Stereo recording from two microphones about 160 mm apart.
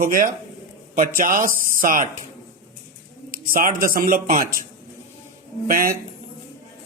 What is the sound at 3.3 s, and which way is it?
Speech, 60° right (ahead or behind).